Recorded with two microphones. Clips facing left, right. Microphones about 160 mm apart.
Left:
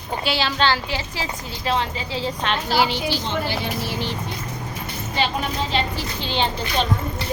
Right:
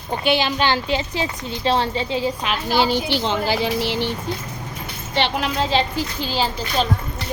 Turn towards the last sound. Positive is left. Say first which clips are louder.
# right 1 dB
turn(degrees=-5)  # may be behind; listen again after turning